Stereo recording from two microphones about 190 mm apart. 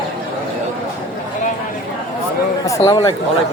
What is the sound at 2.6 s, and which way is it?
Speech, 15° left (ahead or behind).